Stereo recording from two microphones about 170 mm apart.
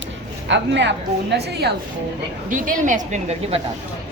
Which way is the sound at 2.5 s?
50° right (ahead or behind).